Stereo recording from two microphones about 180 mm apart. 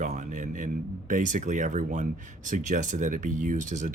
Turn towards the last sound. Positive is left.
turn(degrees=-45)  # may be behind; listen again after turning